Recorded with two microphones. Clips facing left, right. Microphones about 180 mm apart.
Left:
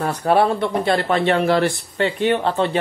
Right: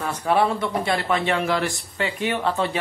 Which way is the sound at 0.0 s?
35° left (ahead or behind).